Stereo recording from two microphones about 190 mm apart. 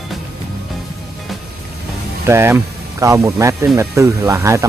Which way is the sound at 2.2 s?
15° right (ahead or behind).